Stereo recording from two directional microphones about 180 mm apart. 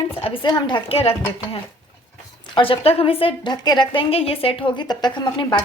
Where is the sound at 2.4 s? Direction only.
30° left (ahead or behind).